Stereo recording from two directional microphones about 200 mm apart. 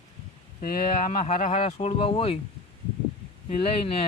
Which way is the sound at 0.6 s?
45° left (ahead or behind).